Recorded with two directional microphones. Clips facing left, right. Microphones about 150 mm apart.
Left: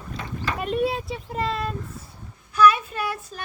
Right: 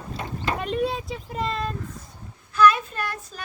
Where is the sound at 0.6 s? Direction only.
Centre (ahead or behind).